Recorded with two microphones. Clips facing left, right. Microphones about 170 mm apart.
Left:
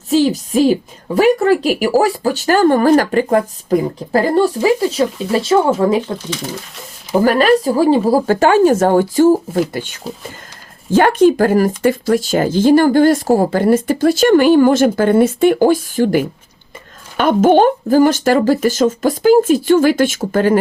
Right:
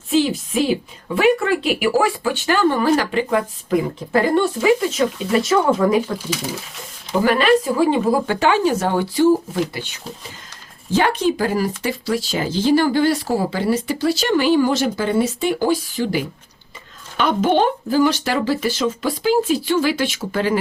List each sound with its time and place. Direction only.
0.1 s a woman's voice: 40° left (ahead or behind)
7.2 s speech: 40° left (ahead or behind)